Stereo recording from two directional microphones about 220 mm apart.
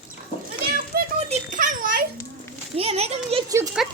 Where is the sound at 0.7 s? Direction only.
35° right (ahead or behind).